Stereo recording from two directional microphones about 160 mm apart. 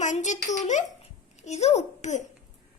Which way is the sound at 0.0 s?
50° left (ahead or behind).